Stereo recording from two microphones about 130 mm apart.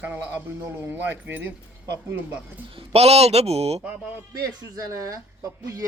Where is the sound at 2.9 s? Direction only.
55° right (ahead or behind).